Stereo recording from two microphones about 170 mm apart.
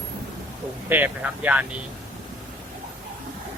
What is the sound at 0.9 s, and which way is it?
Speech, 10° right (ahead or behind).